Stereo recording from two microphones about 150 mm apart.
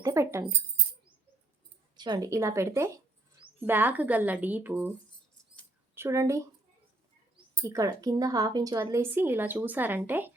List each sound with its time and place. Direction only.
0.0 s speech: 20° right (ahead or behind)
2.0 s a woman's voice: 25° right (ahead or behind)
7.6 s a woman's voice: 20° right (ahead or behind)